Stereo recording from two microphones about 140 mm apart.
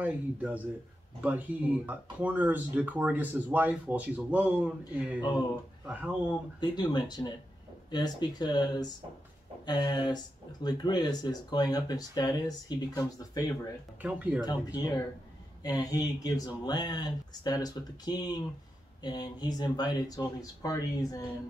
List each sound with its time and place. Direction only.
0.0 s speech: 10° right (ahead or behind)
6.6 s speech: 30° left (ahead or behind)
14.0 s speech: 10° right (ahead or behind)
14.4 s speech: 30° left (ahead or behind)